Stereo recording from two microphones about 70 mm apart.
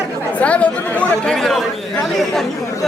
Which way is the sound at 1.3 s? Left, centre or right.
Centre.